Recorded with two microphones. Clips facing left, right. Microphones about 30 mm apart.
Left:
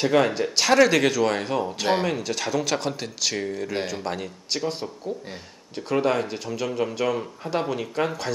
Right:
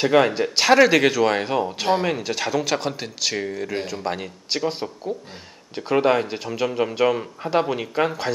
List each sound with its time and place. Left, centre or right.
0.0 s speech: centre